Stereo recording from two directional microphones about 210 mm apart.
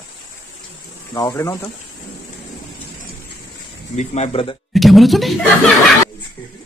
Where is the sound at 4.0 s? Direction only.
30° left (ahead or behind).